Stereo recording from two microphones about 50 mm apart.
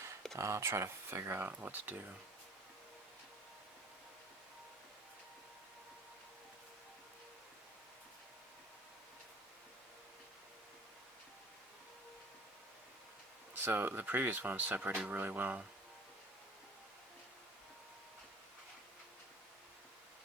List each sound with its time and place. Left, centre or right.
0.3 s speech: right
1.5 s speech: right
13.5 s speech: right